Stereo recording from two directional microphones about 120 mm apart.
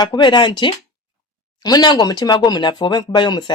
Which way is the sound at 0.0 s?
40° left (ahead or behind).